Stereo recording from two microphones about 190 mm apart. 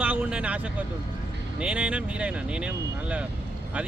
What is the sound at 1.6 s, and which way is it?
Speech, 5° right (ahead or behind).